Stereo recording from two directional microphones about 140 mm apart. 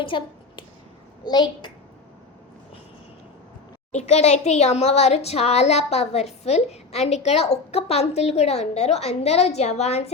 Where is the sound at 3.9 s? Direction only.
50° left (ahead or behind).